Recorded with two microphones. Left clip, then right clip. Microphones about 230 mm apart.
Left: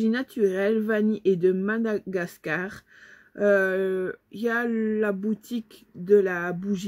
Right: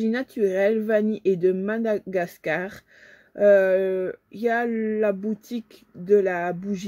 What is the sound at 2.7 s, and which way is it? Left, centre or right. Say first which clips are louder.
Speech: even; right.